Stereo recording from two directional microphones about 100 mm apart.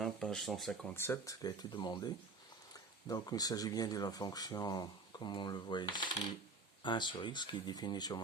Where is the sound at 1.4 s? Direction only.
45° left (ahead or behind).